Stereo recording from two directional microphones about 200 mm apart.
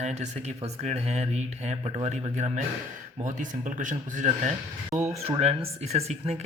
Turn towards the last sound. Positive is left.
turn(degrees=-35)  # may be behind; listen again after turning